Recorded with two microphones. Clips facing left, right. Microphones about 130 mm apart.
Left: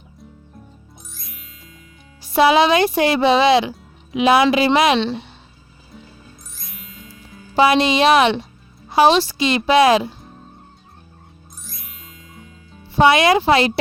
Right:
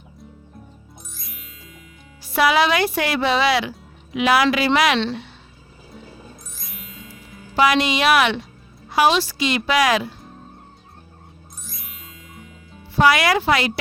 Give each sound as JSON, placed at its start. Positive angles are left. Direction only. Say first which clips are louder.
{"t": 1.1, "sound": "music", "louder": "even", "side_deg": 0}
{"t": 2.2, "sound": "speech", "louder": "left 4 dB", "side_deg": 25}
{"t": 6.5, "sound": "music", "louder": "right 1 dB", "side_deg": 0}
{"t": 7.5, "sound": "speech", "louder": "left 3 dB", "side_deg": 25}
{"t": 11.6, "sound": "music", "louder": "even", "side_deg": 0}
{"t": 13.0, "sound": "speech", "louder": "left 3 dB", "side_deg": 25}